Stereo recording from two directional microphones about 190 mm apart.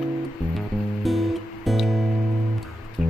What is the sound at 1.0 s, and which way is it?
Music, centre (ahead or behind).